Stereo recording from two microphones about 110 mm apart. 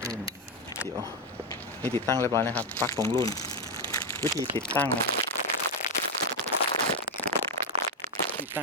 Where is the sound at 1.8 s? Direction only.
20° left (ahead or behind).